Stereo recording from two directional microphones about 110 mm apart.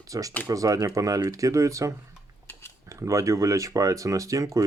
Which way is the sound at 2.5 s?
20° left (ahead or behind).